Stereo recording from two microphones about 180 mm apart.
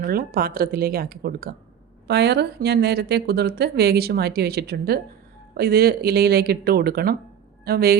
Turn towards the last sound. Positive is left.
turn(degrees=-60)  # may be behind; listen again after turning